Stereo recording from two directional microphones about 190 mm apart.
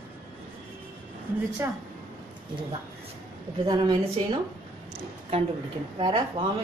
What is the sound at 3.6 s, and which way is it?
Speech, 25° right (ahead or behind).